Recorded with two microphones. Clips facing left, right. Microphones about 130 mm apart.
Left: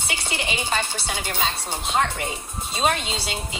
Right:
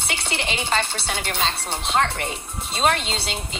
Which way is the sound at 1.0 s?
65° right (ahead or behind).